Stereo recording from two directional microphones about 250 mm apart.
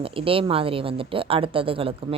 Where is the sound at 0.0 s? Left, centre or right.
Right.